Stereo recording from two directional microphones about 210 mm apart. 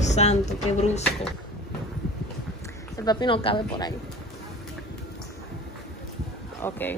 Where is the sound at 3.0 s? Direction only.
20° left (ahead or behind).